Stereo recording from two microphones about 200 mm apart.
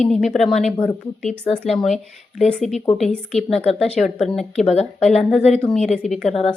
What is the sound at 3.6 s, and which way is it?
Speech, 30° left (ahead or behind).